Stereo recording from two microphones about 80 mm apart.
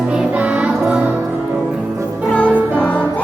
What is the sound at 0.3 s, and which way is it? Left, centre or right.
Music, centre.